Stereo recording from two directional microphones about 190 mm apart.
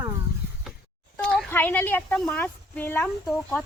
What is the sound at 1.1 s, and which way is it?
Speech, 5° left (ahead or behind).